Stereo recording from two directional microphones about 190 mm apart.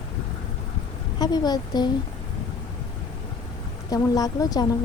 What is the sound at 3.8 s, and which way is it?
Speech, 20° left (ahead or behind).